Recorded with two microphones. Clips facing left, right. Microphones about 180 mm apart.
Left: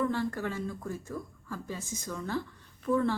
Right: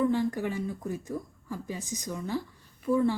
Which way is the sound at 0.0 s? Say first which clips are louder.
Right 4 dB; 15° right (ahead or behind).